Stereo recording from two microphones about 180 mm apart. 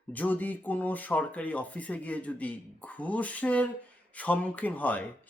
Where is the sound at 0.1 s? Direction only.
10° left (ahead or behind).